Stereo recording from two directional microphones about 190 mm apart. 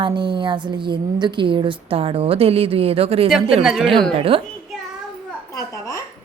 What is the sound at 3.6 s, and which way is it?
Speech, centre (ahead or behind).